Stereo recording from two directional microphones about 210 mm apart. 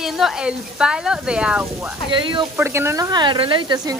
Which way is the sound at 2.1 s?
20° right (ahead or behind).